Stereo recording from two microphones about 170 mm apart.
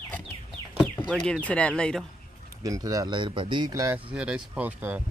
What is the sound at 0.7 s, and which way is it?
Speech, centre (ahead or behind).